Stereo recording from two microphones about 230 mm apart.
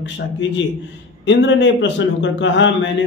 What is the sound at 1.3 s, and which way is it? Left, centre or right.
A man's voice, left.